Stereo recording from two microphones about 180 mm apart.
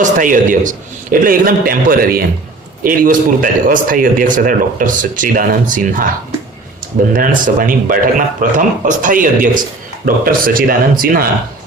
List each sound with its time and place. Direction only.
0.0 s a man's voice: 45° right (ahead or behind)
7.1 s a man's voice: 50° right (ahead or behind)